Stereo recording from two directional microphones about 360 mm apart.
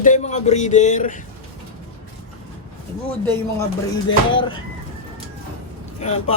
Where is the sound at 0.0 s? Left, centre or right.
Centre.